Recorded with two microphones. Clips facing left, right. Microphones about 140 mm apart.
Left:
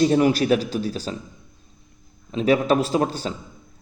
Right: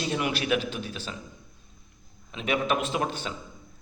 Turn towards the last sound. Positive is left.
turn(degrees=35)  # may be behind; listen again after turning